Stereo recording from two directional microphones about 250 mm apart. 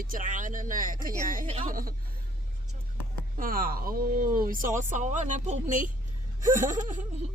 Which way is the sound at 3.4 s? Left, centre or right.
Right.